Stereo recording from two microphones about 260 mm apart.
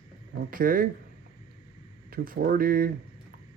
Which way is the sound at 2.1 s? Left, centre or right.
Right.